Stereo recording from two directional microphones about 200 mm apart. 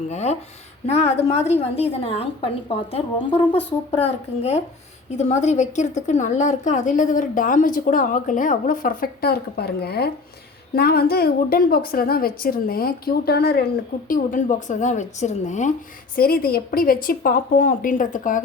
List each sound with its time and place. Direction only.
0.1 s a woman's voice: 35° left (ahead or behind); by 13.7 s 50° left (ahead or behind)
14.1 s a woman's voice: 40° left (ahead or behind)
16.1 s a woman's voice: 50° left (ahead or behind)